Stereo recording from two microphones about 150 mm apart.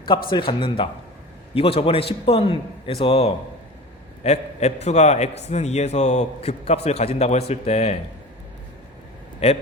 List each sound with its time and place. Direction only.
0.3 s a man's voice: 35° left (ahead or behind)
9.4 s a man's voice: 45° left (ahead or behind)